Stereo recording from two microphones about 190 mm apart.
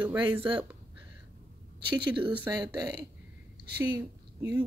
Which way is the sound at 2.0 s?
25° right (ahead or behind).